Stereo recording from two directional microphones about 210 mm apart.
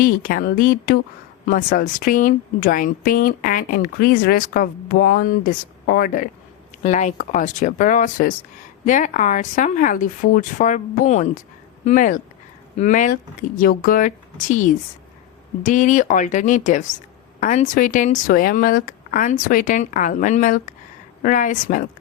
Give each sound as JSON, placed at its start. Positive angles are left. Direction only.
{"t": 0.0, "sound": "speech", "side_deg": 40}